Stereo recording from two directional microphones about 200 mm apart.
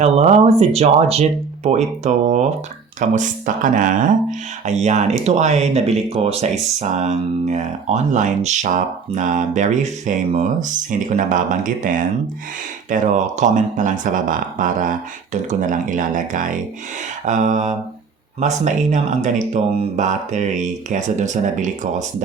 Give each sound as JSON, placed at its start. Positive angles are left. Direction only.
{"t": 0.0, "sound": "speech", "side_deg": -35}